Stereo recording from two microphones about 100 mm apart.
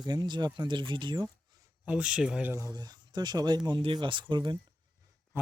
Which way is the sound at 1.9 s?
10° right (ahead or behind).